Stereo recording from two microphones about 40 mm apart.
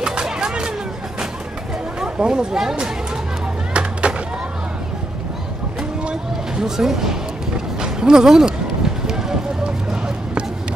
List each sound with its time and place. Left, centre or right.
0.0 s a sound: right
2.0 s speech: centre
4.1 s music: right
6.0 s music: centre
7.8 s run: centre